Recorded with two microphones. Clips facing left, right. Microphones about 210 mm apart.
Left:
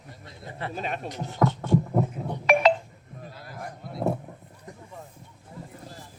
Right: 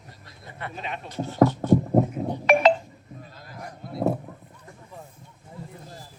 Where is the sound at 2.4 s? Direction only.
Centre (ahead or behind).